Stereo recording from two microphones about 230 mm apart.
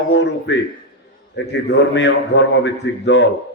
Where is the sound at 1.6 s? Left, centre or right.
Left.